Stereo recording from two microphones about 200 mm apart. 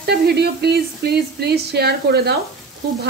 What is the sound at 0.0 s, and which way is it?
Speech, 55° right (ahead or behind).